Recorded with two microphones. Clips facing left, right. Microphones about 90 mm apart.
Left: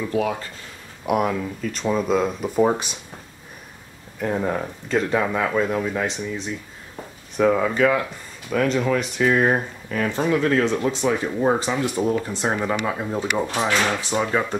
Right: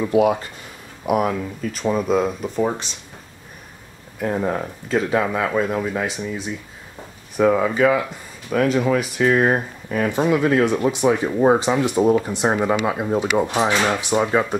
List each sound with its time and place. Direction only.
0.0 s speech: 20° right (ahead or behind)
1.0 s speech: centre (ahead or behind)
2.5 s speech: 15° left (ahead or behind)
4.2 s speech: 5° right (ahead or behind)
9.8 s speech: 15° right (ahead or behind)